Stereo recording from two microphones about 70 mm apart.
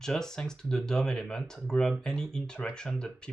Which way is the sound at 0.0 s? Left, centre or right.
Centre.